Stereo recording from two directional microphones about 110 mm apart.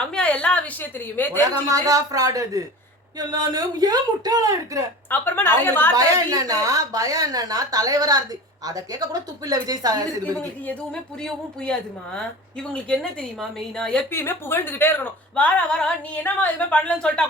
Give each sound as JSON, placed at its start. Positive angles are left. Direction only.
{"t": 0.1, "sound": "a woman's voice", "side_deg": 10}
{"t": 1.5, "sound": "a woman's voice", "side_deg": -35}
{"t": 5.0, "sound": "speech", "side_deg": 20}
{"t": 5.9, "sound": "a woman's voice", "side_deg": -35}
{"t": 11.2, "sound": "a woman's voice", "side_deg": 5}
{"t": 14.1, "sound": "a woman's voice", "side_deg": 20}